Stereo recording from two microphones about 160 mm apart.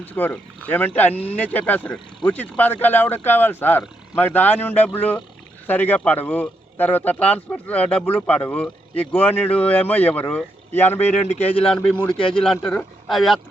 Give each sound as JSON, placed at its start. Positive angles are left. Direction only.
{"t": 0.0, "sound": "speech", "side_deg": 10}
{"t": 11.3, "sound": "speech", "side_deg": 40}
{"t": 11.6, "sound": "speech", "side_deg": 5}